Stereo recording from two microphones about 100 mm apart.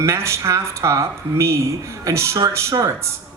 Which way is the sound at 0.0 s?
30° right (ahead or behind).